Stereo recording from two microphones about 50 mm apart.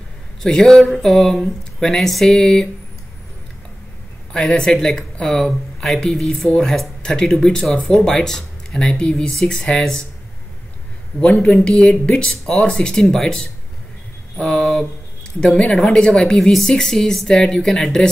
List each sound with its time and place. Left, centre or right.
0.4 s speech: centre
4.3 s speech: centre
11.1 s speech: left
14.3 s a sound: centre
15.4 s speech: centre